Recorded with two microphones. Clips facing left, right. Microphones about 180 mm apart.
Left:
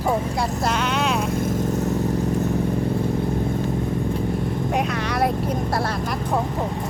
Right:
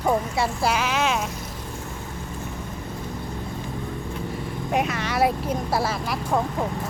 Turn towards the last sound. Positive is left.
turn(degrees=-5)  # may be behind; listen again after turning